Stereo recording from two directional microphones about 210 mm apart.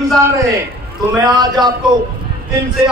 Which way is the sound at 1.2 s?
20° right (ahead or behind).